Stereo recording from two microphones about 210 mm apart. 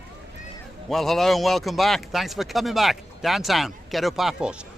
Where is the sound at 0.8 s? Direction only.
Centre (ahead or behind).